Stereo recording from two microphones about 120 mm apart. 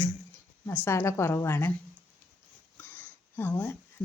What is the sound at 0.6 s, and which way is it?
A woman's voice, 20° left (ahead or behind).